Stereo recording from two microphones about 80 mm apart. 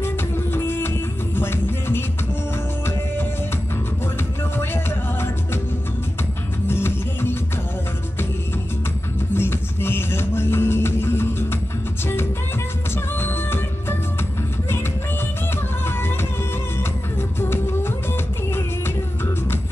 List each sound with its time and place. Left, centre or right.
0.0 s music: left
4.6 s music: left
6.7 s music: left
9.3 s music: left
12.9 s music: left
15.8 s music: left
17.4 s music: left